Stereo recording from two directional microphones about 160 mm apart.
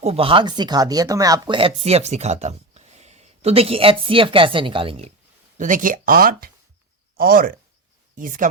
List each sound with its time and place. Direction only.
0.0 s speech: 35° right (ahead or behind); by 1.5 s 20° right (ahead or behind)
1.5 s speech: 40° right (ahead or behind)
5.5 s speech: 55° right (ahead or behind)
8.1 s speech: 55° right (ahead or behind)